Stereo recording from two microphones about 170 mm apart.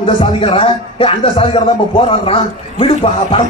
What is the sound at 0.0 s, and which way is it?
A man's voice, 30° left (ahead or behind).